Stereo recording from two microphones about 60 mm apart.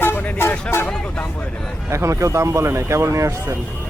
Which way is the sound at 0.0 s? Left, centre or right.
Left.